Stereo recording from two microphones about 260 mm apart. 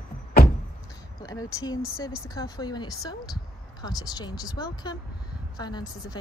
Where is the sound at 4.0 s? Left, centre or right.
Centre.